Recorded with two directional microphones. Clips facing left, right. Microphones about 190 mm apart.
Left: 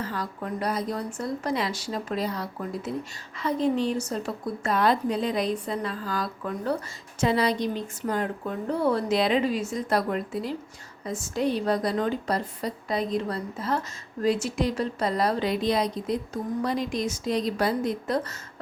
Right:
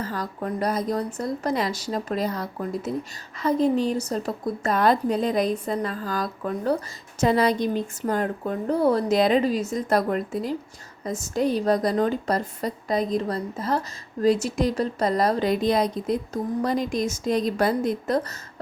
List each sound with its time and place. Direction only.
0.0 s a woman's voice: 40° right (ahead or behind)